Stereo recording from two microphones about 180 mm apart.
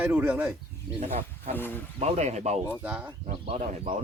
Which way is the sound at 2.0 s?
40° right (ahead or behind).